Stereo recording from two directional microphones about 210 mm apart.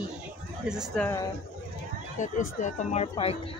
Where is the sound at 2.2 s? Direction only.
35° left (ahead or behind).